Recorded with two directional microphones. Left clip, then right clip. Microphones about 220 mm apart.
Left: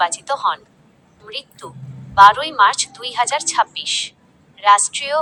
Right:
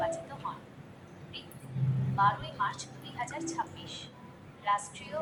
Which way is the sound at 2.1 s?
45° left (ahead or behind).